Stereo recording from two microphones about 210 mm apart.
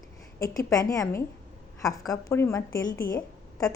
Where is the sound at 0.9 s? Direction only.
15° left (ahead or behind).